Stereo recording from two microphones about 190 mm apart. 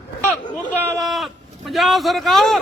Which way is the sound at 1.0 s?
Centre (ahead or behind).